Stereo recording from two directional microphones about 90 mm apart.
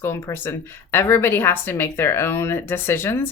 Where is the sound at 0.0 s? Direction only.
30° left (ahead or behind).